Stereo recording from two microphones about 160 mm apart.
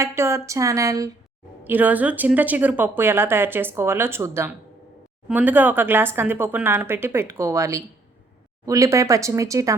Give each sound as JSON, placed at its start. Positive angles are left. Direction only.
{"t": 0.0, "sound": "speech", "side_deg": -15}
{"t": 1.6, "sound": "speech", "side_deg": -10}